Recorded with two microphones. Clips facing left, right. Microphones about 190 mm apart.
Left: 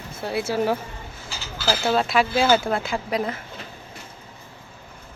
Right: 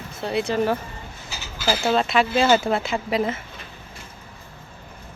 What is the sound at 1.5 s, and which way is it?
Speech, 10° right (ahead or behind).